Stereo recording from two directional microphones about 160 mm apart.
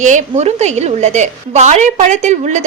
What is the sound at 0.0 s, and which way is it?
A woman's voice, 50° right (ahead or behind).